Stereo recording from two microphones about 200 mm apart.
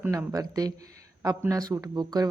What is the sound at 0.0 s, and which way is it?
Speech, 15° right (ahead or behind).